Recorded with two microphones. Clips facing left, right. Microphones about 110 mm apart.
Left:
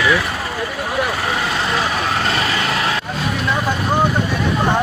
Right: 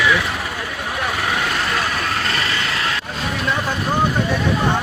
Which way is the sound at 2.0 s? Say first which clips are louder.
Left 3 dB; 35° left (ahead or behind).